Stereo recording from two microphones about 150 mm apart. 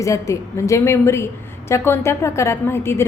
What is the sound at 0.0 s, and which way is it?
A woman's voice, 20° left (ahead or behind).